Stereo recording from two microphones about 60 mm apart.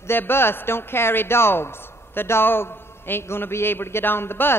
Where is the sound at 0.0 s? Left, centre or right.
Left.